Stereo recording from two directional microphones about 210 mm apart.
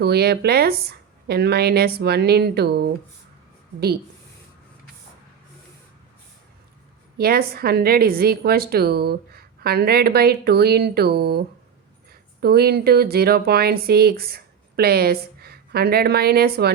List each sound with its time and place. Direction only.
0.0 s speech: 50° right (ahead or behind)
7.2 s speech: 45° right (ahead or behind)